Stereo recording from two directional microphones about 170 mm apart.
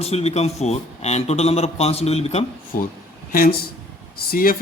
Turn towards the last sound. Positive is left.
turn(degrees=60)  # may be behind; listen again after turning